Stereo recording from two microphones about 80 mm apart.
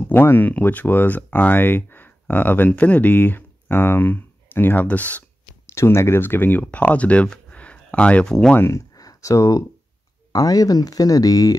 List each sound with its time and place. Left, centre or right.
0.1 s speech: left
5.7 s speech: left; by 8.4 s centre
8.5 s speech: left
8.9 s a sound: left
10.3 s speech: left